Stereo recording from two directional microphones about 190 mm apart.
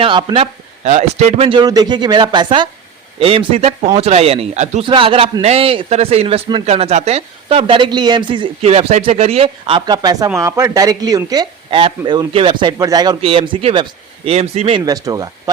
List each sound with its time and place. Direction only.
0.0 s speech: 25° right (ahead or behind)
0.9 s a man's voice: 35° right (ahead or behind)
14.8 s speech: 20° right (ahead or behind)